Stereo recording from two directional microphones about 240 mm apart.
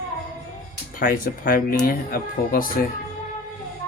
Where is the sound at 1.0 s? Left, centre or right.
Left.